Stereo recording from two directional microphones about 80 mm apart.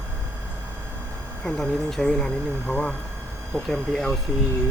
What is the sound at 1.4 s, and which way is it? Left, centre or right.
Speech, centre.